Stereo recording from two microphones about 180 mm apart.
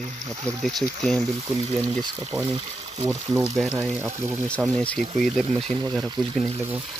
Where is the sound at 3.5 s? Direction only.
Centre (ahead or behind).